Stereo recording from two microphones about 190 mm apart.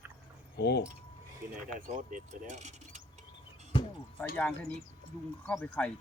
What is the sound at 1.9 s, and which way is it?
Mechanisms, 45° right (ahead or behind).